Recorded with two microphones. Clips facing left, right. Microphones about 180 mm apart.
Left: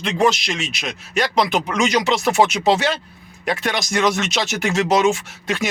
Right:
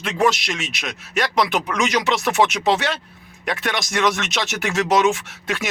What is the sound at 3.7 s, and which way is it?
Music, centre (ahead or behind).